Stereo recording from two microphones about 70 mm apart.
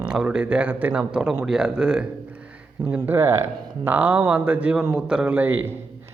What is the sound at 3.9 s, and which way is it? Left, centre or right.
Speech, right.